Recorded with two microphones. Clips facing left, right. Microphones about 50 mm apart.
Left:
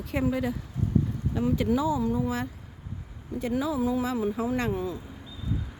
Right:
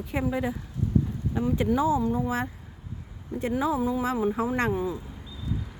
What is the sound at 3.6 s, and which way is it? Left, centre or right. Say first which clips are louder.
Speech: right 3 dB; right.